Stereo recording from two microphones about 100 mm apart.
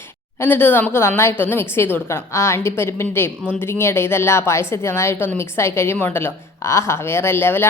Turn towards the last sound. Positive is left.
turn(degrees=20)  # may be behind; listen again after turning